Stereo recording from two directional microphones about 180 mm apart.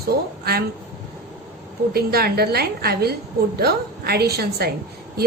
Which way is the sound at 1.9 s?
60° right (ahead or behind).